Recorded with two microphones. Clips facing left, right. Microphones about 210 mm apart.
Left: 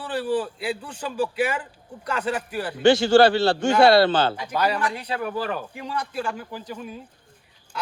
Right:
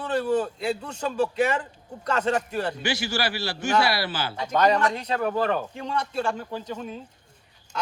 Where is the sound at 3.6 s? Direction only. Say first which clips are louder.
Left 5 dB; 25° left (ahead or behind).